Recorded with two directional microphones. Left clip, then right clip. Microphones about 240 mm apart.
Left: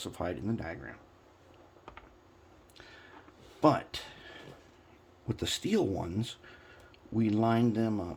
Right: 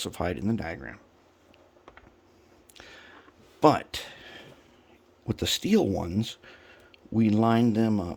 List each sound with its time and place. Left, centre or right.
0.0 s speech: right
2.7 s a sound: right
5.2 s speech: right